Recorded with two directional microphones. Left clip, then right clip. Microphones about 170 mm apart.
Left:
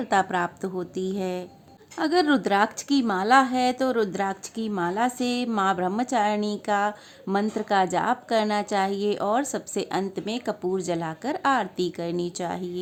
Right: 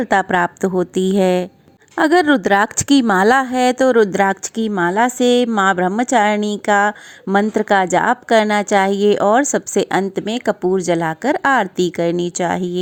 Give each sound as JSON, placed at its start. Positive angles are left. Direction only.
{"t": 0.0, "sound": "a woman's voice", "side_deg": -35}